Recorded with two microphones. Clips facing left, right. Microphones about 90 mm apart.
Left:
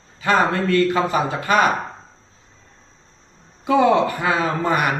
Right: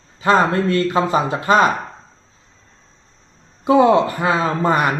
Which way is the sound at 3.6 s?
30° right (ahead or behind).